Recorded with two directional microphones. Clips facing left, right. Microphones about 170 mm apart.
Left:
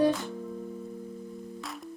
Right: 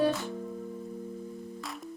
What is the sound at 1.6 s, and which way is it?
Music, centre (ahead or behind).